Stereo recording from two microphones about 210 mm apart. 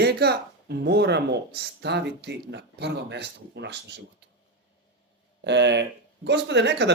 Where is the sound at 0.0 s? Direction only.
50° right (ahead or behind).